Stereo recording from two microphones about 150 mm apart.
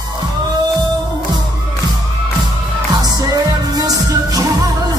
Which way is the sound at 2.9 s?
25° right (ahead or behind).